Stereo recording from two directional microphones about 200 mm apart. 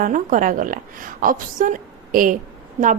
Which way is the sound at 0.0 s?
40° right (ahead or behind).